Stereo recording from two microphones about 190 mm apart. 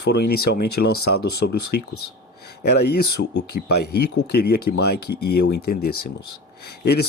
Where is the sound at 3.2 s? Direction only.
90° left.